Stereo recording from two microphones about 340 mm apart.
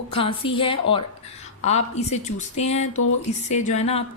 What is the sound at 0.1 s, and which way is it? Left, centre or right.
A woman's voice, centre.